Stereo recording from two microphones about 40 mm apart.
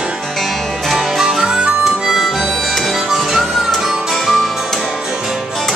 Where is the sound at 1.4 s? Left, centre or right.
Centre.